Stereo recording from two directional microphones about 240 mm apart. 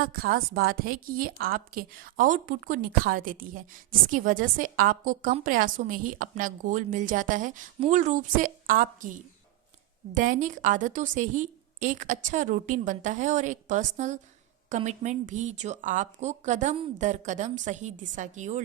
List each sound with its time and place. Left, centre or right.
0.1 s a woman's voice: right
10.2 s a woman's voice: right